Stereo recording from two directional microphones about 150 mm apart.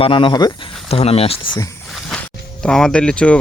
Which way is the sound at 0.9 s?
40° left (ahead or behind).